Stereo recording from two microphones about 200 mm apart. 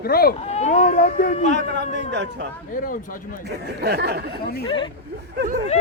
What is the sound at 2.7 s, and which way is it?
Speech, 45° left (ahead or behind).